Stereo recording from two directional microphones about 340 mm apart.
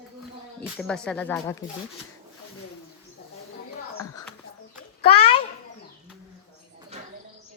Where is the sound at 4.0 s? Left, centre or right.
Centre.